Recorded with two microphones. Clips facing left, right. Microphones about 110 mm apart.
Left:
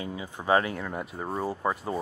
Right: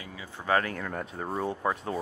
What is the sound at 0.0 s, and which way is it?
Speech, 20° left (ahead or behind).